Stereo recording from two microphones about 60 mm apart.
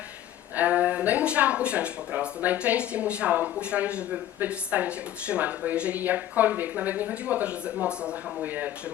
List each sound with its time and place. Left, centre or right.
0.5 s speech: right